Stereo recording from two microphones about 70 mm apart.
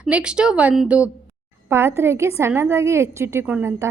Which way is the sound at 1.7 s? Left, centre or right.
Right.